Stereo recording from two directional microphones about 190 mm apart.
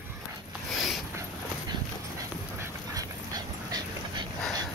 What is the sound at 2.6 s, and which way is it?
Dog, 20° right (ahead or behind).